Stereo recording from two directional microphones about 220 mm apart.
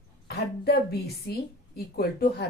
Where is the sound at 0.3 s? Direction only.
45° left (ahead or behind).